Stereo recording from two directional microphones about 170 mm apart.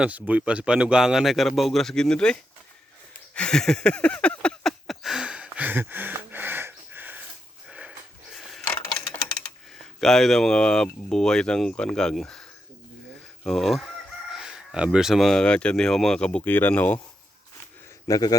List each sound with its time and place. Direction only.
0.0 s speech: 10° right (ahead or behind)
3.3 s a sound: 5° left (ahead or behind); by 7.2 s 10° right (ahead or behind)
7.7 s sniff: 5° right (ahead or behind)
9.7 s speech: centre (ahead or behind)
18.1 s a man's voice: 20° left (ahead or behind)